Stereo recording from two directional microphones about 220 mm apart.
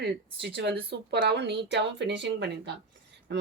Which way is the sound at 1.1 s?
50° right (ahead or behind).